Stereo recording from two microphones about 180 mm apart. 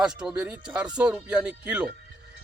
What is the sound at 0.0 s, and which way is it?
Speech, 5° right (ahead or behind).